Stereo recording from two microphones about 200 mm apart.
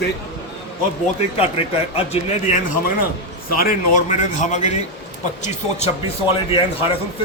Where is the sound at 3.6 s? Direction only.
40° left (ahead or behind).